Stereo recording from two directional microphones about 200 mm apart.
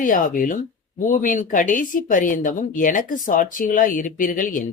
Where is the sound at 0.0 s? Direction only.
40° left (ahead or behind).